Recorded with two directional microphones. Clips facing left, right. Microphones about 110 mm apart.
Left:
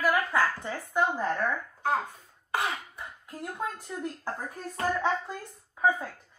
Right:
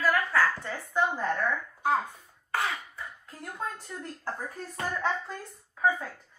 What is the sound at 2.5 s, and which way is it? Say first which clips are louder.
Cough: even; 20° left (ahead or behind).